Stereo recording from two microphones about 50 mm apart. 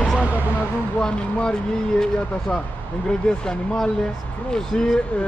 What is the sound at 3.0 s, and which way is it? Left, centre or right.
Speech, centre.